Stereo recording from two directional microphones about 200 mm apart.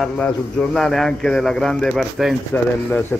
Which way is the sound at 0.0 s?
5° left (ahead or behind).